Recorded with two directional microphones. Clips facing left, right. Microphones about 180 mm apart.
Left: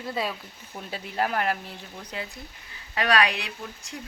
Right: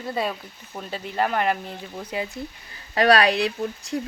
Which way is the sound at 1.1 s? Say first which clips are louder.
Right 3 dB; 5° left (ahead or behind).